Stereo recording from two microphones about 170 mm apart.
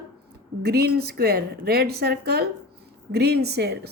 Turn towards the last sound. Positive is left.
turn(degrees=-75)  # may be behind; listen again after turning